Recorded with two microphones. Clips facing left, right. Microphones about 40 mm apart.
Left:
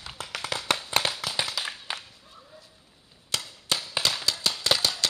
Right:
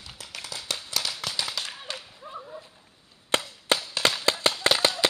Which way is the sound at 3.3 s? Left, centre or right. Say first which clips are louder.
Right 6 dB; right.